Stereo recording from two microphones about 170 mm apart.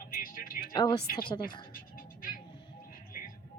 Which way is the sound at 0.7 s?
25° left (ahead or behind).